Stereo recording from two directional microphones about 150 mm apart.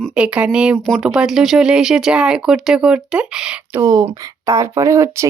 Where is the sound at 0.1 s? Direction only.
5° right (ahead or behind).